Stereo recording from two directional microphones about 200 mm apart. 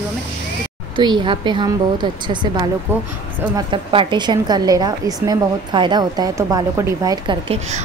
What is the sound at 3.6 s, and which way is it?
A woman's voice, 25° right (ahead or behind).